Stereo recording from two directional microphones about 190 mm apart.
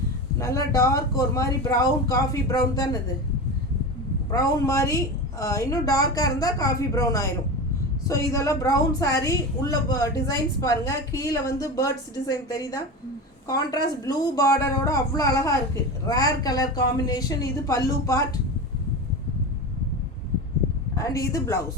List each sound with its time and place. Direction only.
0.3 s a woman's voice: 15° left (ahead or behind)
4.3 s a woman's voice: 20° left (ahead or behind)
14.0 s a woman's voice: 20° left (ahead or behind)
20.9 s a woman's voice: 15° left (ahead or behind)